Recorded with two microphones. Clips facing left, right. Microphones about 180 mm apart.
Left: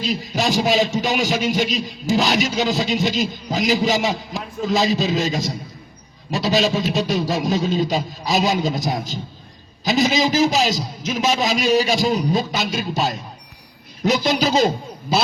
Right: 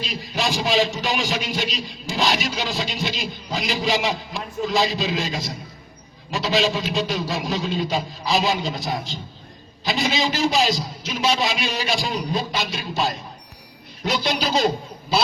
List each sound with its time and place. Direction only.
0.0 s a man's voice: 45° left (ahead or behind)
14.0 s a man's voice: 45° left (ahead or behind)